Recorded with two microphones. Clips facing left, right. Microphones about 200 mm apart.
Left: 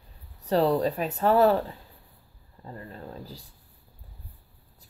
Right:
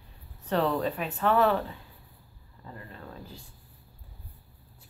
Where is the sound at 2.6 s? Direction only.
35° left (ahead or behind).